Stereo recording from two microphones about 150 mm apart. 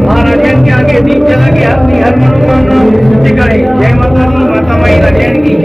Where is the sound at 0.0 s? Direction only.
Centre (ahead or behind).